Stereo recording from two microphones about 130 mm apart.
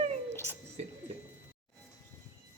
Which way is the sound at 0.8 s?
55° right (ahead or behind).